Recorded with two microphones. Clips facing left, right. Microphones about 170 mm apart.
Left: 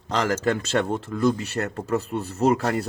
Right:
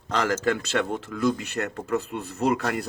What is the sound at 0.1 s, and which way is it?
Speech, 30° left (ahead or behind).